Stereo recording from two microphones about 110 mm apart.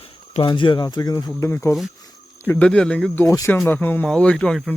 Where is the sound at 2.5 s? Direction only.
10° left (ahead or behind).